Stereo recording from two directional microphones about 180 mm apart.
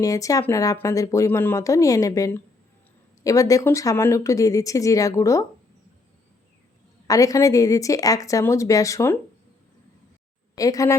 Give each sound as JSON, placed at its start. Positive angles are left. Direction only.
{"t": 0.0, "sound": "speech", "side_deg": 20}
{"t": 7.1, "sound": "a woman's voice", "side_deg": 20}
{"t": 10.5, "sound": "a woman's voice", "side_deg": 20}